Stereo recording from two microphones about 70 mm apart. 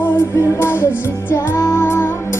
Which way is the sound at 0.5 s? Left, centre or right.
Left.